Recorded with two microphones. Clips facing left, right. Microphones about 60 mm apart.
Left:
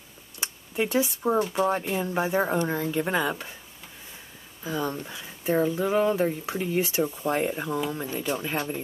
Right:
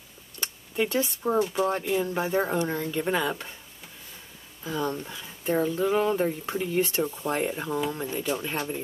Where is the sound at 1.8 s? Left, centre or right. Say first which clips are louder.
Even; centre.